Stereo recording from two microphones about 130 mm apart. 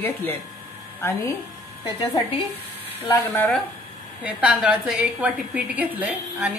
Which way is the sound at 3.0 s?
15° left (ahead or behind).